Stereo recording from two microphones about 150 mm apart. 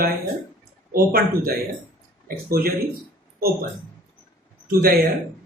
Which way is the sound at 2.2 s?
85° right.